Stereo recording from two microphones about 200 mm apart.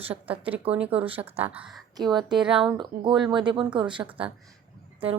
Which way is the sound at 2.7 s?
25° right (ahead or behind).